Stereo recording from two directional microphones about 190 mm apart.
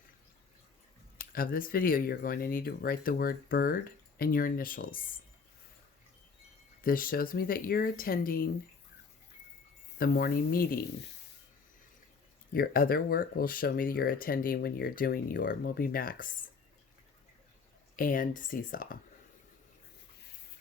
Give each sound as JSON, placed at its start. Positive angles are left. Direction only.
{"t": 1.2, "sound": "speech", "side_deg": 50}
{"t": 6.8, "sound": "speech", "side_deg": 50}
{"t": 10.0, "sound": "speech", "side_deg": 50}
{"t": 12.5, "sound": "speech", "side_deg": 50}
{"t": 17.9, "sound": "speech", "side_deg": 45}